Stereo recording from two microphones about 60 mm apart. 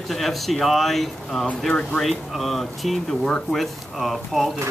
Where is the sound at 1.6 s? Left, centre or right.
Centre.